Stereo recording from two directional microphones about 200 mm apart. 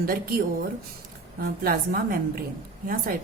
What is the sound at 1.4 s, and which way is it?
Speech, 50° right (ahead or behind).